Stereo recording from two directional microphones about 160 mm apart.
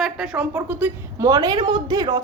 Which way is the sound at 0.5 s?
15° right (ahead or behind).